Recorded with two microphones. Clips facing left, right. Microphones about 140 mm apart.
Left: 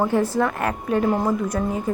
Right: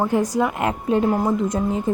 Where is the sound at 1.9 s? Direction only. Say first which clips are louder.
Right 3 dB; 25° right (ahead or behind).